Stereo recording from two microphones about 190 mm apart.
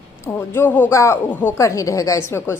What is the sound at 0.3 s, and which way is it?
A woman's voice, 10° left (ahead or behind).